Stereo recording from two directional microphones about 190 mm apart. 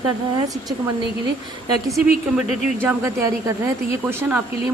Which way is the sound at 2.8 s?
15° right (ahead or behind).